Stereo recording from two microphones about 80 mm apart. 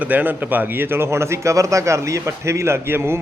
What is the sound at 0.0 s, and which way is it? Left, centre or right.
A man's voice, right.